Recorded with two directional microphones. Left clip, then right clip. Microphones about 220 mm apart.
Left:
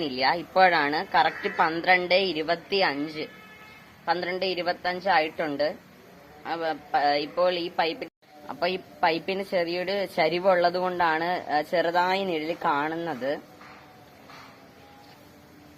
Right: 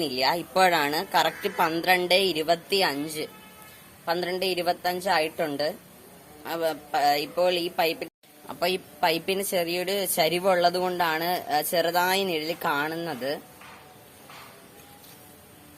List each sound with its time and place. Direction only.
0.0 s speech: 50° right (ahead or behind)